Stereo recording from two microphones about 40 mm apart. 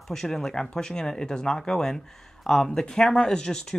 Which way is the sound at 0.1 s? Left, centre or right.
Centre.